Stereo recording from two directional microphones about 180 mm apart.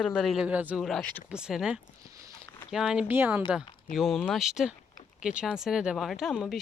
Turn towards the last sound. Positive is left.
turn(degrees=0)  # may be behind; listen again after turning